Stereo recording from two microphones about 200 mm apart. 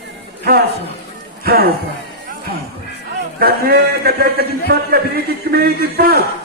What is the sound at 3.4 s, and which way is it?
A man's voice, 50° right (ahead or behind).